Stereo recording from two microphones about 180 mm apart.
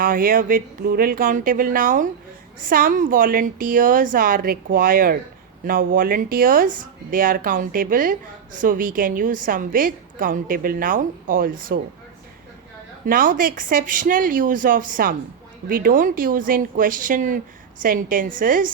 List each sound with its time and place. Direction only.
0.0 s a woman's voice: 50° right (ahead or behind)
13.1 s a woman's voice: 50° right (ahead or behind)